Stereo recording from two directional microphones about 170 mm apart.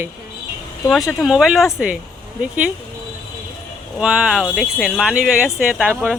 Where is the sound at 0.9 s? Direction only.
Centre (ahead or behind).